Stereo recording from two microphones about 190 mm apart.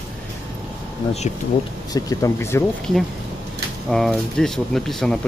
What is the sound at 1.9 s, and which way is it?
Speech, 20° left (ahead or behind).